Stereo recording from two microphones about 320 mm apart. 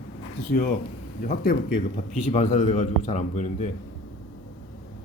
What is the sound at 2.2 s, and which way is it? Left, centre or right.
Speech, left.